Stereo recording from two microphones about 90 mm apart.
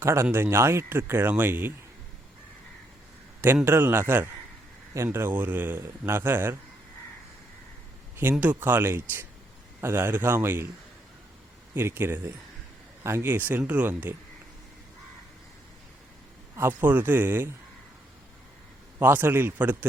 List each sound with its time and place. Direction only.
0.0 s speech: 30° right (ahead or behind)
3.4 s speech: 25° right (ahead or behind)
8.1 s speech: 20° right (ahead or behind)
11.7 s speech: 25° right (ahead or behind)
16.6 s speech: 20° right (ahead or behind)
18.9 s speech: 25° right (ahead or behind)